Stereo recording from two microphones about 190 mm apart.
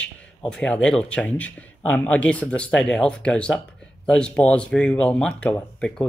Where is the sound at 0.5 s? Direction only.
5° left (ahead or behind).